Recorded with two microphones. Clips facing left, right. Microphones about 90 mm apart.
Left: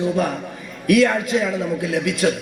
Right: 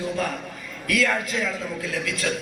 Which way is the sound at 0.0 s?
25° left (ahead or behind).